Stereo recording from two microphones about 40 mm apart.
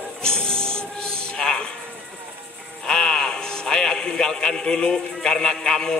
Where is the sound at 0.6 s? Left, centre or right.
Centre.